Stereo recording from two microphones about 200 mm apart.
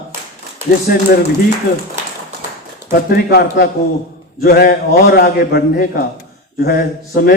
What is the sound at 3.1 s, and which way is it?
Speech, 50° left (ahead or behind).